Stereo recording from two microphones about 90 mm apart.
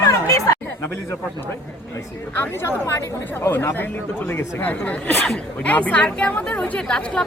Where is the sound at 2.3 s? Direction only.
30° left (ahead or behind).